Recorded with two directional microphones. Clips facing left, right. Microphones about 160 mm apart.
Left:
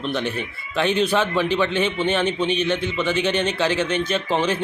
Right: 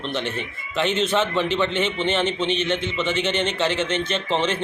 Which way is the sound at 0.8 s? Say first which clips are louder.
Left 2 dB; 10° left (ahead or behind).